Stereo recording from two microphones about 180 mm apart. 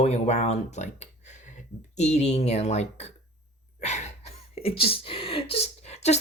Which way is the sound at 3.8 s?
40° left (ahead or behind).